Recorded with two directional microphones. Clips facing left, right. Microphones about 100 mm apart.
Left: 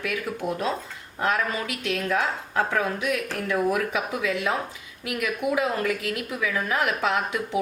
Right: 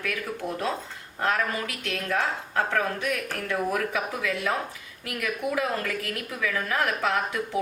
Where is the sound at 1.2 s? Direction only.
20° left (ahead or behind).